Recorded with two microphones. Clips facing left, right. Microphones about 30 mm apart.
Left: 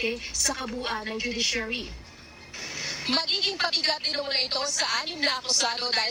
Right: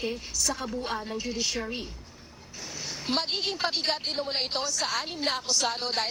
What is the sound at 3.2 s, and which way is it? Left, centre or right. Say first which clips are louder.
Speech: left 3 dB; left.